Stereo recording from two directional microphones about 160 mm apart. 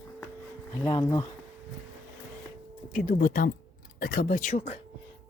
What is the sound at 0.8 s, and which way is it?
Speech, 25° left (ahead or behind).